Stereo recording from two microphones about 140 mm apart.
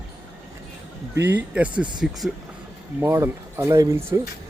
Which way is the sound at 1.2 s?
15° right (ahead or behind).